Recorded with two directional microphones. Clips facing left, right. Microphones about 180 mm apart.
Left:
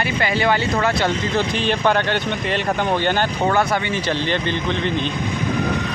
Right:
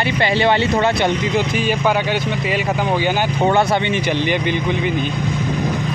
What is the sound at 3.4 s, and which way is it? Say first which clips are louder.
Speech: right 5 dB; 25° right (ahead or behind).